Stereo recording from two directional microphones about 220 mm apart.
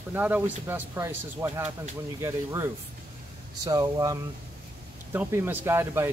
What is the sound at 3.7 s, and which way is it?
Speech, 15° right (ahead or behind).